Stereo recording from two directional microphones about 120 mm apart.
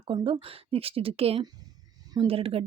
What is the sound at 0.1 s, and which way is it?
A woman's voice, 45° right (ahead or behind).